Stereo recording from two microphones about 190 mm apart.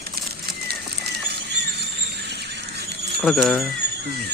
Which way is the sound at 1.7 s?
60° right (ahead or behind).